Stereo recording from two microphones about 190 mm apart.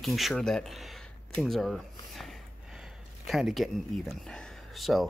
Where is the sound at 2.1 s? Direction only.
Centre (ahead or behind).